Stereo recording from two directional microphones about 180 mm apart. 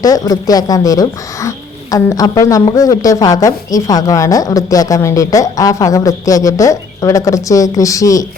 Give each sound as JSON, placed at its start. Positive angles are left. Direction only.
{"t": 0.0, "sound": "a woman's voice", "side_deg": 20}